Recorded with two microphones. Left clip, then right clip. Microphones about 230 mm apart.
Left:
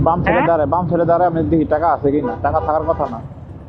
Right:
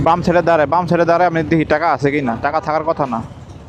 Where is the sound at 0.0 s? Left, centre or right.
Right.